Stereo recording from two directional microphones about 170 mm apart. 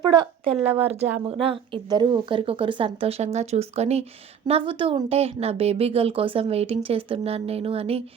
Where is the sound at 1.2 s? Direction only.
30° right (ahead or behind).